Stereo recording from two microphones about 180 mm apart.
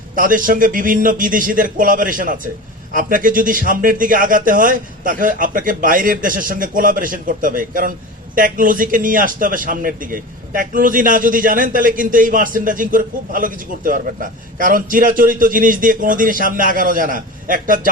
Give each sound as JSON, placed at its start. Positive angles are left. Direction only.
{"t": 0.2, "sound": "a man's voice", "side_deg": -50}